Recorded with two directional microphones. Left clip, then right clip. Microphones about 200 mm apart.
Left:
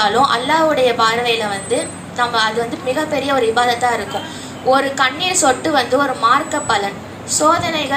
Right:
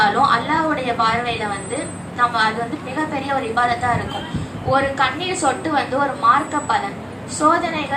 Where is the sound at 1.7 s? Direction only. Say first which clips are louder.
Left 6 dB; 55° left (ahead or behind).